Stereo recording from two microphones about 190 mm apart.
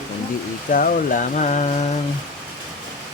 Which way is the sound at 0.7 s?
45° left (ahead or behind).